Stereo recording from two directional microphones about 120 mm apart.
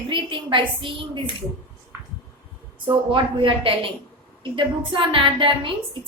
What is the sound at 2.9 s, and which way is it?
A woman's voice, 45° right (ahead or behind).